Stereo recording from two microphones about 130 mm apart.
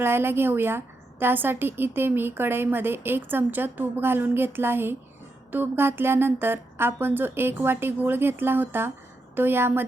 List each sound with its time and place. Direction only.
0.0 s a woman's voice: 15° right (ahead or behind)